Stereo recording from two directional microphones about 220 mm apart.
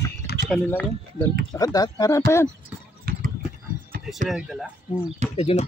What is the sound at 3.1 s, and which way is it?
Clip-clop, 40° right (ahead or behind).